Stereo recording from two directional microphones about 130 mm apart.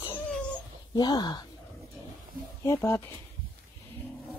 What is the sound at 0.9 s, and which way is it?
Speech, 30° left (ahead or behind).